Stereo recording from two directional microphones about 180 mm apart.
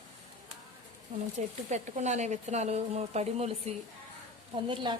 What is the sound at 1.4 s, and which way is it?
Speech, 40° right (ahead or behind).